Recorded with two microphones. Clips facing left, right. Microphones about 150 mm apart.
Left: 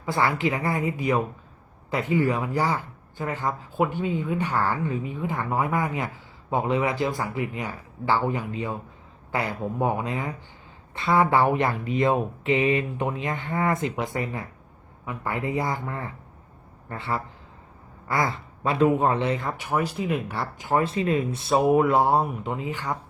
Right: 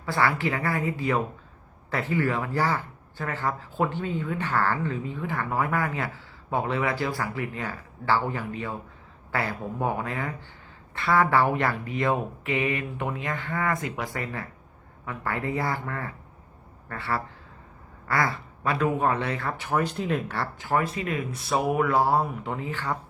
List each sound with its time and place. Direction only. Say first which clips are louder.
0.0 s a man's voice: left 1 dB; 20° left (ahead or behind)